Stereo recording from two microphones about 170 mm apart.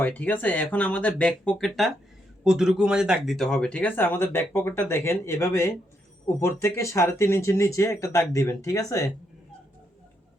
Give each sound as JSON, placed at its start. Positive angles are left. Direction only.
{"t": 0.0, "sound": "speech", "side_deg": 10}